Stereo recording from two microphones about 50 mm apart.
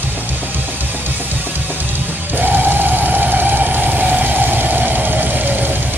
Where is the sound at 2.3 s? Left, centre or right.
Right.